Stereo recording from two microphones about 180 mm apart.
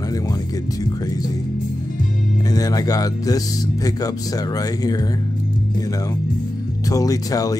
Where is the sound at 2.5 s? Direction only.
20° left (ahead or behind).